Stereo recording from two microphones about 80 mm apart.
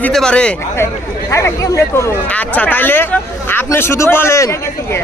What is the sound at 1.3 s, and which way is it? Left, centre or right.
Speech, left.